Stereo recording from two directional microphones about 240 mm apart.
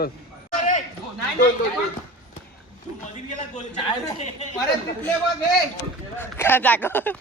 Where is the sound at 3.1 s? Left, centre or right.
Left.